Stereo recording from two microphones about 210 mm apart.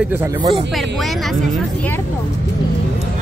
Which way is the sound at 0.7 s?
Centre (ahead or behind).